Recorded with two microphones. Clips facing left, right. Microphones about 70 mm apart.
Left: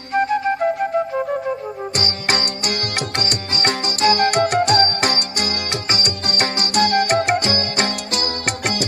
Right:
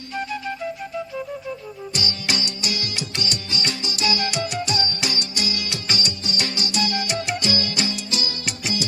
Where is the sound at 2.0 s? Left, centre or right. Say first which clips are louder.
Left 4 dB; left.